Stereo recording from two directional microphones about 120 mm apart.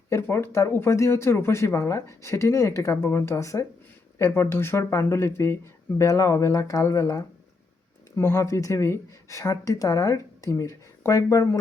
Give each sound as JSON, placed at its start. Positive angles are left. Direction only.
{"t": 0.1, "sound": "speech", "side_deg": 20}